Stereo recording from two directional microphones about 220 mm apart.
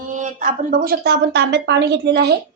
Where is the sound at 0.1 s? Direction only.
35° right (ahead or behind); by 2.4 s 50° right (ahead or behind).